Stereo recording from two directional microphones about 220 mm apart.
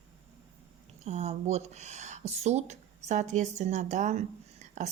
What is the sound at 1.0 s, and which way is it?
A woman's voice, 30° right (ahead or behind).